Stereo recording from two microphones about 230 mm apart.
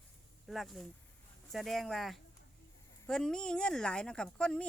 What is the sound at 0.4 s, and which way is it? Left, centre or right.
A woman's voice, centre.